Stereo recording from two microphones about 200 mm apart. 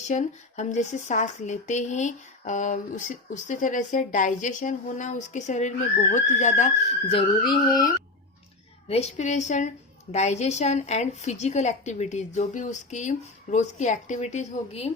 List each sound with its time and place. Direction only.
0.1 s speech: 35° left (ahead or behind); by 7.9 s 20° left (ahead or behind)
8.9 s speech: 30° left (ahead or behind)